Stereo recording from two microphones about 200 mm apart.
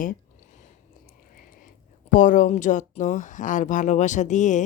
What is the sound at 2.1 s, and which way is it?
Speech, 40° left (ahead or behind).